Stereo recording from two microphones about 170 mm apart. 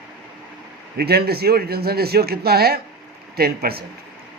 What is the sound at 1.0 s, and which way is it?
A man's voice, 70° right (ahead or behind).